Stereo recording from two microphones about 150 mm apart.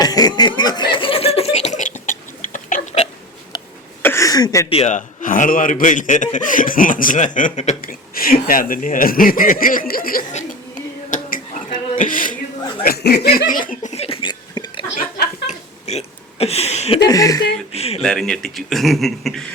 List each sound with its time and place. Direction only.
0.0 s chuckle: 25° left (ahead or behind); by 3.1 s 50° left (ahead or behind)
3.5 s a sound: 25° left (ahead or behind)
4.7 s a man's voice: 50° left (ahead or behind)
7.8 s speech: 75° left (ahead or behind)
10.3 s a sound: 60° left (ahead or behind)
12.8 s speech: 90° left; by 13.9 s 65° left (ahead or behind)
13.9 s a sound: 40° left (ahead or behind)
15.4 s burping: 45° left (ahead or behind)
17.0 s speech: 25° left (ahead or behind)
17.7 s speech: 45° left (ahead or behind)
18.0 s a man's voice: 5° left (ahead or behind)